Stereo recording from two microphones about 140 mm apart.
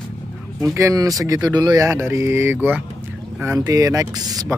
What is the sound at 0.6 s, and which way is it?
Speech, 25° right (ahead or behind).